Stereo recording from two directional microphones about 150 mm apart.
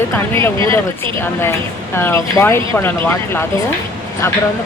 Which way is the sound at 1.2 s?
15° left (ahead or behind).